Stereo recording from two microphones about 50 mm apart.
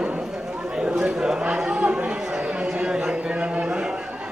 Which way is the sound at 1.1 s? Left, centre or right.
Centre.